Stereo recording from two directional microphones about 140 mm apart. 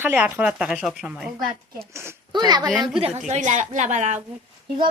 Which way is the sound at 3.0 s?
55° right (ahead or behind).